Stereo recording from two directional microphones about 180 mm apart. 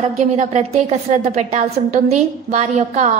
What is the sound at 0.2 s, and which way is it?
A woman's voice, 40° right (ahead or behind).